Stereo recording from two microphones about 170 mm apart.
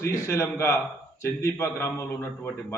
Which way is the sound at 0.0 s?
15° left (ahead or behind).